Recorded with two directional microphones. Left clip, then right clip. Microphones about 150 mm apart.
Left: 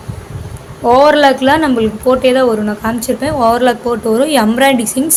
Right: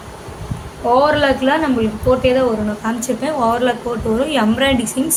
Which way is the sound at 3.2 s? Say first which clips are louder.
Left 5 dB; 50° left (ahead or behind).